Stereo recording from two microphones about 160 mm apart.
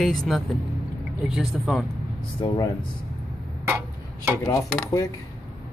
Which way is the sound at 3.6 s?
15° right (ahead or behind).